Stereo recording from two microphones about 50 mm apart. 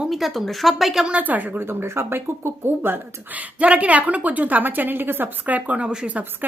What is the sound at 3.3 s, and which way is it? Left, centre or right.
A woman's voice, right.